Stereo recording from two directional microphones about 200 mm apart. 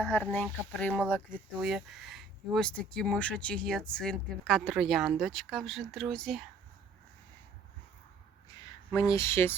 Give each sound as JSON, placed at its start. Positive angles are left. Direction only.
{"t": 0.1, "sound": "speech", "side_deg": 5}
{"t": 1.3, "sound": "speech", "side_deg": -40}
{"t": 1.6, "sound": "speech", "side_deg": 0}
{"t": 8.9, "sound": "speech", "side_deg": 15}